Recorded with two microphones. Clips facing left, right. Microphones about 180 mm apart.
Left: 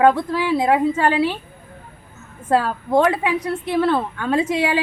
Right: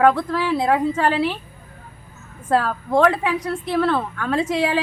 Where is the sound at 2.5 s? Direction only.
15° left (ahead or behind).